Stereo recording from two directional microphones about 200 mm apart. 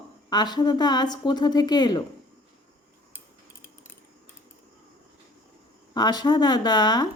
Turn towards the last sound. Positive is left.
turn(degrees=20)  # may be behind; listen again after turning